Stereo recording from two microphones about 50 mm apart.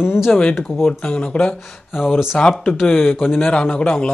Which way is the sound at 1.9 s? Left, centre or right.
Centre.